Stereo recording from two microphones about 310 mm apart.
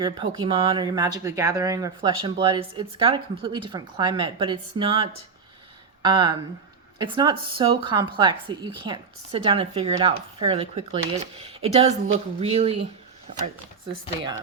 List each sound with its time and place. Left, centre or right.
0.0 s speech: centre